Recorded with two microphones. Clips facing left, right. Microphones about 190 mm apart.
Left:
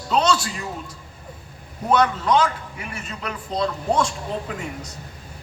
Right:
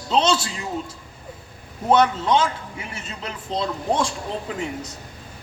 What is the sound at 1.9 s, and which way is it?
A man's voice, 25° right (ahead or behind).